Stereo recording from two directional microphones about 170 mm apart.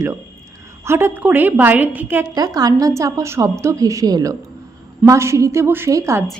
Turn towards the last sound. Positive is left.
turn(degrees=-15)  # may be behind; listen again after turning